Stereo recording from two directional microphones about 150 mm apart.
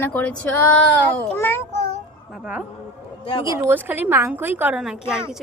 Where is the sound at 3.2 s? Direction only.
35° left (ahead or behind).